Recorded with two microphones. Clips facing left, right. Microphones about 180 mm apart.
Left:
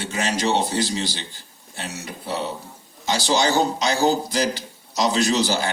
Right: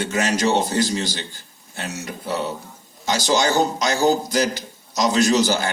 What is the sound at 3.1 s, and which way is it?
A man's voice, 45° right (ahead or behind).